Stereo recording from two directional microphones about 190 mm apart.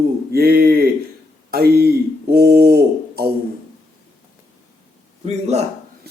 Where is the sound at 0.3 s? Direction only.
55° right (ahead or behind).